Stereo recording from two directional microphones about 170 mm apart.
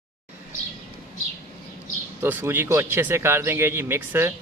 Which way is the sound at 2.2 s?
10° right (ahead or behind).